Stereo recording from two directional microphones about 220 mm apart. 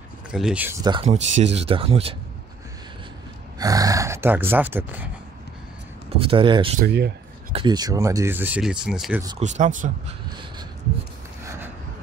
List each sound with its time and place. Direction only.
0.3 s speech: 5° right (ahead or behind)
0.8 s speech: 25° right (ahead or behind)
3.5 s speech: 15° right (ahead or behind)
6.0 s speech: 25° right (ahead or behind)
6.8 s speech: 50° right (ahead or behind)
7.5 s speech: 20° right (ahead or behind); by 9.2 s 5° right (ahead or behind)
9.4 s speech: 35° right (ahead or behind)